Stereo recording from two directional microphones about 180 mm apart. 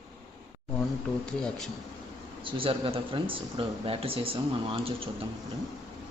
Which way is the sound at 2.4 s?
30° right (ahead or behind).